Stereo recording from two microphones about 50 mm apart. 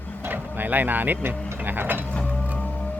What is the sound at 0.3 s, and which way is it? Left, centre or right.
Speech, right.